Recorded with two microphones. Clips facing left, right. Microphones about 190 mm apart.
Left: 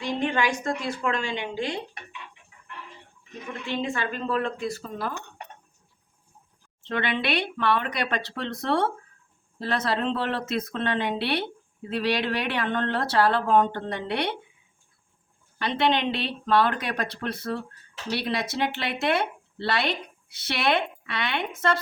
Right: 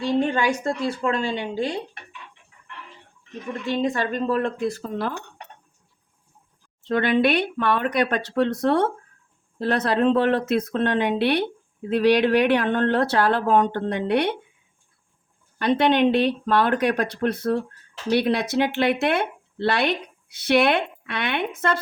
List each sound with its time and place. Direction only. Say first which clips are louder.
0.2 s speech: right 4 dB; 40° right (ahead or behind)
3.7 s speech: right 5 dB; 40° right (ahead or behind)
6.8 s speech: right 8 dB; 40° right (ahead or behind)
15.5 s a woman's voice: right 5 dB; 50° right (ahead or behind)